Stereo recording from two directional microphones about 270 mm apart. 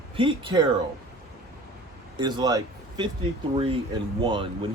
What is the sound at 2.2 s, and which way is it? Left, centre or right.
A man's voice, centre.